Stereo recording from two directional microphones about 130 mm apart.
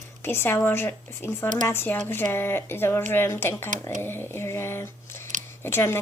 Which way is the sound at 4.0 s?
20° left (ahead or behind).